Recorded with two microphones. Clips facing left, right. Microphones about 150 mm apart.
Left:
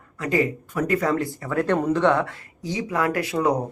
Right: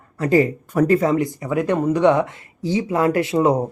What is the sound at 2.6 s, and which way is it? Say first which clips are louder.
Speech: right 6 dB; 30° right (ahead or behind).